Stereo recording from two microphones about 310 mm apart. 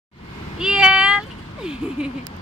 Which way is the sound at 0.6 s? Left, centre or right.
Centre.